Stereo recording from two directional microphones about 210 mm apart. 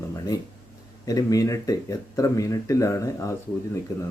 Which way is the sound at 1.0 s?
15° left (ahead or behind).